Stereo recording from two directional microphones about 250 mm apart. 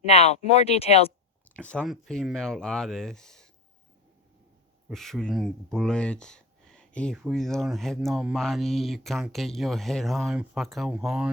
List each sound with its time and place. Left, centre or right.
0.0 s speech: left
1.5 s speech: centre
4.9 s speech: centre